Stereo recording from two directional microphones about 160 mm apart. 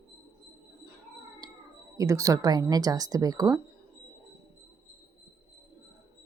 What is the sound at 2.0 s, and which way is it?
A woman's voice, 20° right (ahead or behind).